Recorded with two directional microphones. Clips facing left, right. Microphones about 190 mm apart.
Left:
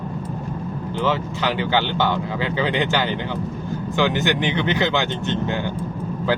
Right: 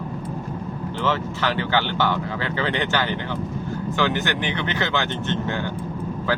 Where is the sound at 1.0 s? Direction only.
15° left (ahead or behind).